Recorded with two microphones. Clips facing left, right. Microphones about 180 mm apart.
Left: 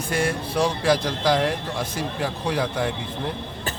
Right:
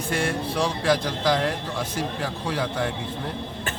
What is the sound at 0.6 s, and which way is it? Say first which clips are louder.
Speech: left 3 dB; 10° left (ahead or behind).